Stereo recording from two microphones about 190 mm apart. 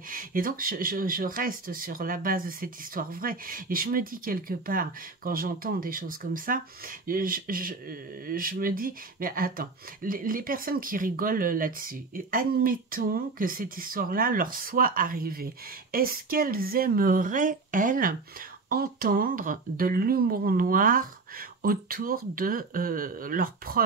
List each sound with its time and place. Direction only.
0.1 s speech: 50° right (ahead or behind)